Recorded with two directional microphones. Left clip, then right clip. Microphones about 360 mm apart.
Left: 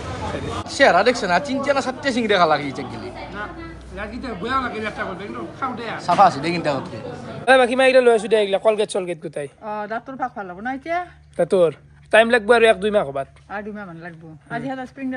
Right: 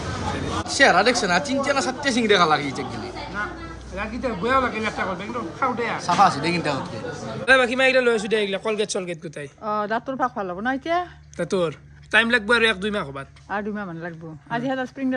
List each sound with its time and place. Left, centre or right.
0.7 s a man's voice: centre
9.7 s speech: centre
11.3 s a man's voice: centre
13.5 s speech: centre